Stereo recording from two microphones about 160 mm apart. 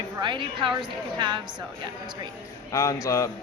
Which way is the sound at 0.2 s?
30° right (ahead or behind).